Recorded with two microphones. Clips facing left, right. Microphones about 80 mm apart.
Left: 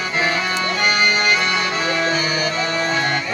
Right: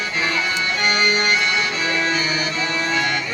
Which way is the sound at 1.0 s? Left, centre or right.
Left.